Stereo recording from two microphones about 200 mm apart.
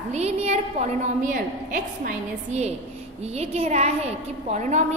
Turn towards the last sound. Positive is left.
turn(degrees=-35)  # may be behind; listen again after turning